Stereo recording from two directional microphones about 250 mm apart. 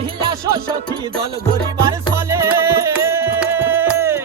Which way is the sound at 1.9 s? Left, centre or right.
Centre.